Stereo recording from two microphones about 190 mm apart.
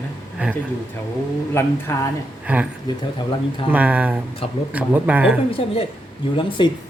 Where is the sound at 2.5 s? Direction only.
10° right (ahead or behind).